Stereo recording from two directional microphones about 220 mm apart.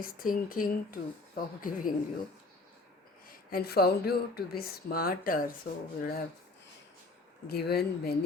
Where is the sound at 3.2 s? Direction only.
45° left (ahead or behind).